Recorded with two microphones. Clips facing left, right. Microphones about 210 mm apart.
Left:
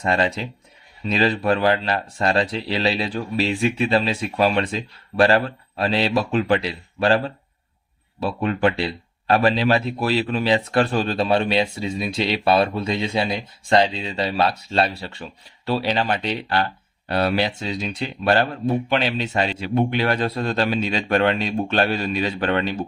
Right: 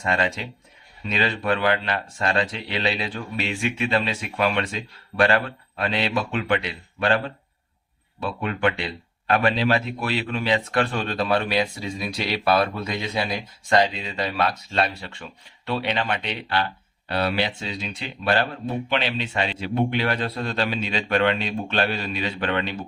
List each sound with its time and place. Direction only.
0.0 s speech: 35° left (ahead or behind)
8.2 s speech: 35° left (ahead or behind)